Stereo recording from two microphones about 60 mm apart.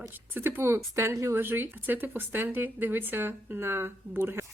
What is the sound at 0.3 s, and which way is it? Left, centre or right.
A woman's voice, right.